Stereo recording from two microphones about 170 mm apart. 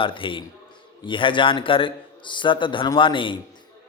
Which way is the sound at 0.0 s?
30° left (ahead or behind).